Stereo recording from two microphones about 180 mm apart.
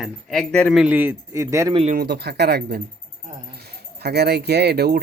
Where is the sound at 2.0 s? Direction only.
65° right (ahead or behind).